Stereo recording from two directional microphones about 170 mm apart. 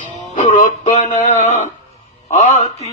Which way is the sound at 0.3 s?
45° left (ahead or behind).